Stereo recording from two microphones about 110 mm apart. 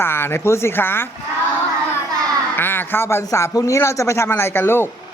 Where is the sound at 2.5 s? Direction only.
20° left (ahead or behind).